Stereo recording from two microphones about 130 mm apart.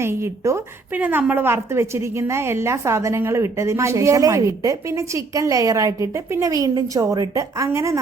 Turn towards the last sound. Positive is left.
turn(degrees=-20)  # may be behind; listen again after turning